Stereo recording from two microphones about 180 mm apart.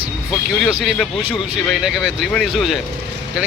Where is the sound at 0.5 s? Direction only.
Centre (ahead or behind).